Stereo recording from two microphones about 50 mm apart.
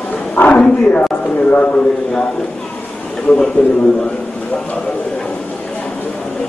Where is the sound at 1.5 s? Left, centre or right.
Left.